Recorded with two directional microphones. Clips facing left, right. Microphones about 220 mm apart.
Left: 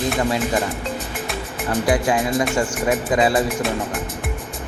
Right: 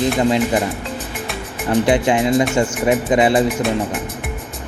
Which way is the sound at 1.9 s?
25° right (ahead or behind).